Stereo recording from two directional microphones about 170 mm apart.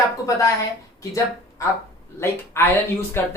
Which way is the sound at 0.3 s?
20° left (ahead or behind).